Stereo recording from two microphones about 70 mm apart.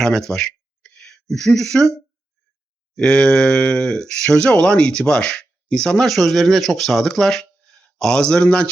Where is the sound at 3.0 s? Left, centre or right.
Centre.